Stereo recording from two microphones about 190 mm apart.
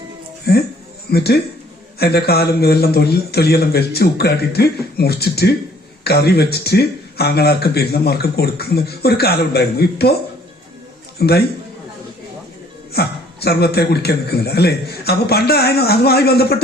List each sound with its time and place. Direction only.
0.5 s speech: 55° left (ahead or behind)
11.2 s speech: 55° left (ahead or behind)
12.9 s speech: 55° left (ahead or behind)